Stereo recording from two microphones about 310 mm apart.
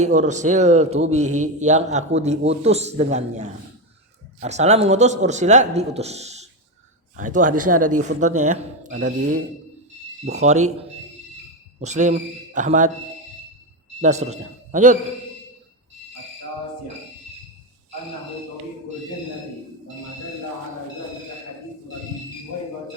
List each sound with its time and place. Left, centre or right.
0.0 s speech: right
10.3 s speech: right
14.0 s speech: right